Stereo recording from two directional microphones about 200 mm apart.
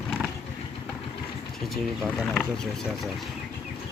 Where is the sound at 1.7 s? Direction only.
Centre (ahead or behind).